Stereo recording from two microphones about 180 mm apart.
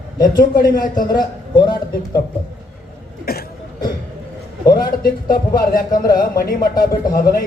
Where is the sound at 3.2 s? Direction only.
60° left (ahead or behind).